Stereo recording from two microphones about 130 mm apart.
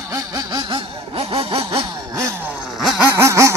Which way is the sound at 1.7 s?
35° right (ahead or behind).